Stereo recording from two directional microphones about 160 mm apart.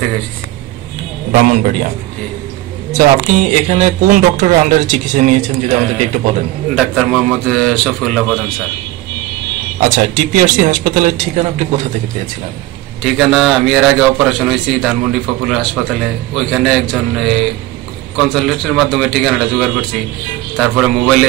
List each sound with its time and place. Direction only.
1.3 s speech: 60° right (ahead or behind)
3.0 s speech: 50° right (ahead or behind)
6.7 s a man's voice: 5° left (ahead or behind)
9.8 s speech: 55° right (ahead or behind)
13.0 s a man's voice: centre (ahead or behind)